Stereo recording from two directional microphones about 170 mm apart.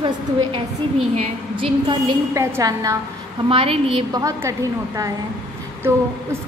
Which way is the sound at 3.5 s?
35° right (ahead or behind).